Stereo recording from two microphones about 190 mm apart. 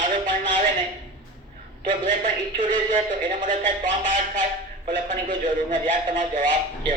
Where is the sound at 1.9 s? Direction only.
45° right (ahead or behind).